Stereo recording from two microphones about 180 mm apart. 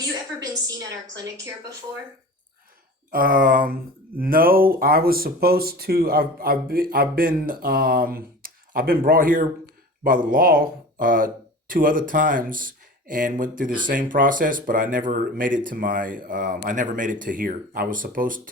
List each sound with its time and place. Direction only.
3.1 s speech: 50° right (ahead or behind)